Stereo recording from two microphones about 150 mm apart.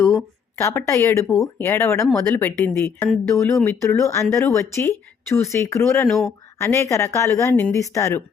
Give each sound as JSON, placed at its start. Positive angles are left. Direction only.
{"t": 0.6, "sound": "speech", "side_deg": 20}
{"t": 6.1, "sound": "speech", "side_deg": 0}
{"t": 6.6, "sound": "speech", "side_deg": 20}